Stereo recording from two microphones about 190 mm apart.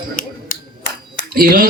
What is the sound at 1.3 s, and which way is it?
Speech, 50° right (ahead or behind).